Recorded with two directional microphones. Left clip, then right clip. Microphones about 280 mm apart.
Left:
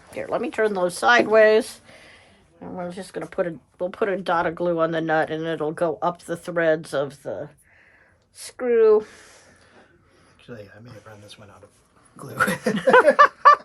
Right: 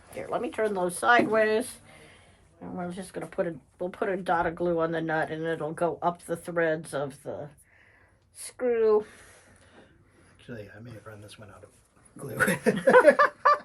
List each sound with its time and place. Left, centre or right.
0.1 s speech: left
8.4 s speech: left
10.4 s a man's voice: centre
12.3 s a man's voice: centre
12.7 s speech: left
13.1 s a sound: left